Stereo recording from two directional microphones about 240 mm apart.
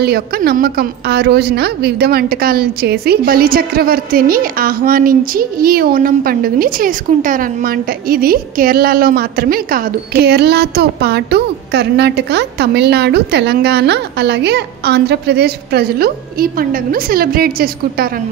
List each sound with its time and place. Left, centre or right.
0.0 s a woman's voice: right